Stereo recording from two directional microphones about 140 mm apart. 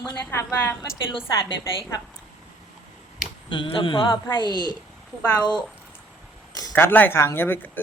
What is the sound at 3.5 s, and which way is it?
Speech, 35° left (ahead or behind).